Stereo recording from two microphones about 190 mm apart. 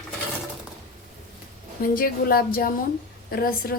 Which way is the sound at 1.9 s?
50° left (ahead or behind).